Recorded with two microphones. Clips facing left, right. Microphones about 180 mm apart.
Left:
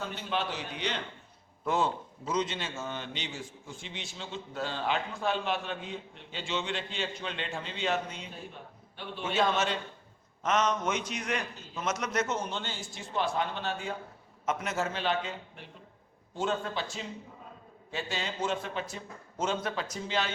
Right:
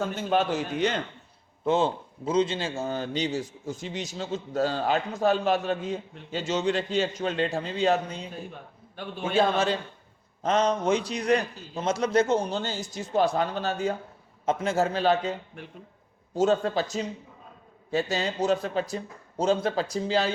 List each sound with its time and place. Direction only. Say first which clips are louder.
0.0 s a man's voice: right 8 dB; 45° right (ahead or behind)
1.6 s a man's voice: right 5 dB; 25° right (ahead or behind); by 9.3 s 45° right (ahead or behind)
10.4 s a man's voice: right 5 dB; 30° right (ahead or behind)
14.4 s a man's voice: right 7 dB; 30° right (ahead or behind)